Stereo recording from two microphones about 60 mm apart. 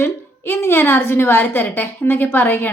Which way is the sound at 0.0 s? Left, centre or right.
Left.